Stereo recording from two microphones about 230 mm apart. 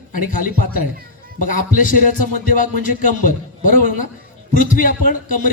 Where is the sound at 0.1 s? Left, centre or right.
Left.